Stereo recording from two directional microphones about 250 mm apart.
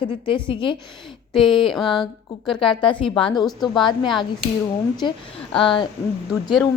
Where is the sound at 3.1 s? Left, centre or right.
Centre.